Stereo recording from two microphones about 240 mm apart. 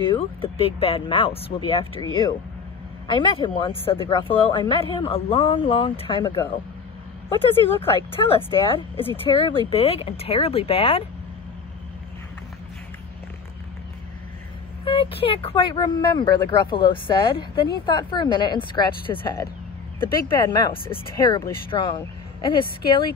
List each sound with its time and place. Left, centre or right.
0.0 s speech: left
3.1 s speech: centre
7.8 s speech: left
14.9 s speech: left